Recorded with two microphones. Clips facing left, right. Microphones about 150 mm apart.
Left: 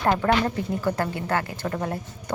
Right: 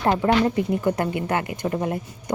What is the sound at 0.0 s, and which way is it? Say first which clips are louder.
A woman's voice: right 2 dB; 20° right (ahead or behind).